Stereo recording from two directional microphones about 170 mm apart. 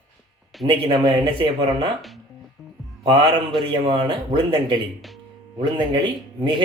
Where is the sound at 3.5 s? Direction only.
30° right (ahead or behind).